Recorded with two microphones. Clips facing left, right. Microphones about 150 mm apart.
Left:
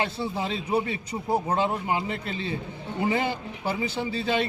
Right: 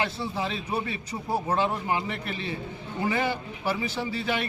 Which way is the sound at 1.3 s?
20° left (ahead or behind).